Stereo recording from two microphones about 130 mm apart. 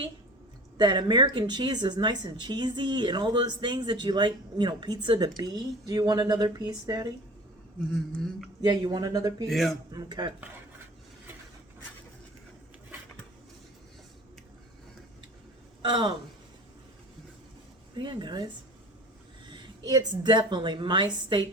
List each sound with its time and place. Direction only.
0.8 s speech: 35° right (ahead or behind)
7.9 s speech: centre (ahead or behind)
8.6 s speech: 35° right (ahead or behind)
9.5 s speech: centre (ahead or behind)
9.9 s speech: 35° right (ahead or behind)
15.8 s a woman's voice: 40° right (ahead or behind)
17.9 s speech: 35° right (ahead or behind)
19.5 s speech: 35° right (ahead or behind)